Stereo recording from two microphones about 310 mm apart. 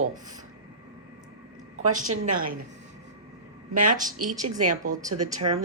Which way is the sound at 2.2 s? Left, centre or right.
Right.